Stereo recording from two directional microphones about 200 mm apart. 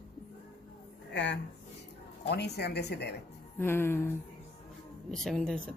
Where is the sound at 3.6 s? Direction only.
10° left (ahead or behind).